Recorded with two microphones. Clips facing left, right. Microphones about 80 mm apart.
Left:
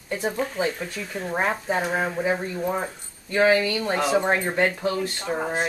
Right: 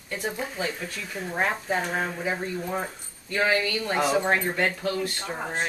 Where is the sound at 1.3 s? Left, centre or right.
Left.